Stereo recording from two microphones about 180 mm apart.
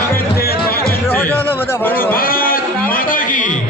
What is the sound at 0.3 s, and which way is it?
Music, 60° left (ahead or behind).